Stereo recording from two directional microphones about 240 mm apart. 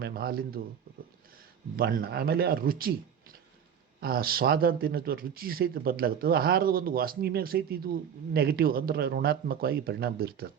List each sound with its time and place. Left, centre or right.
0.0 s speech: right
1.7 s speech: right
4.0 s speech: right